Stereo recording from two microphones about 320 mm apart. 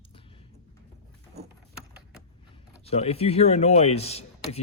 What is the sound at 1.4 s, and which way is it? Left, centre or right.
Boat, centre.